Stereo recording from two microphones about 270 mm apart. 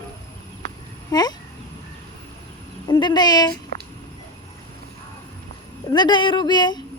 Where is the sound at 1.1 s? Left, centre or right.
Centre.